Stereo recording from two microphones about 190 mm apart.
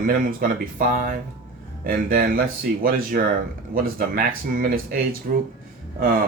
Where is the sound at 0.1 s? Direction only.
45° right (ahead or behind).